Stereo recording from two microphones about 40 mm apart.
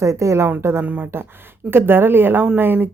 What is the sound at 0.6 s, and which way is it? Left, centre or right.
Speech, right.